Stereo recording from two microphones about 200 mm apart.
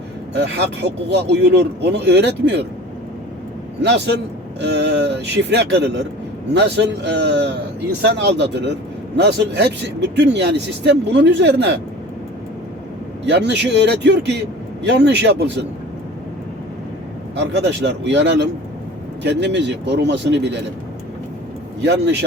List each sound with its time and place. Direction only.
1.1 s speech: 60° right (ahead or behind)
3.8 s speech: 60° right (ahead or behind)
13.2 s speech: 60° right (ahead or behind)
17.3 s speech: 60° right (ahead or behind)
21.8 s speech: 60° right (ahead or behind)